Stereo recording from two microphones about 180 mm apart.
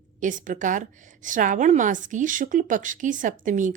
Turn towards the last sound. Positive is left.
turn(degrees=-45)  # may be behind; listen again after turning